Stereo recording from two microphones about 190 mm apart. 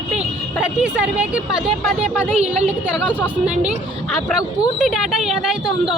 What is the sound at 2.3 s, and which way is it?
Speech, 35° right (ahead or behind).